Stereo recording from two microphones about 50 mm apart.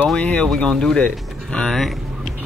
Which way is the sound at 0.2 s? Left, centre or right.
Left.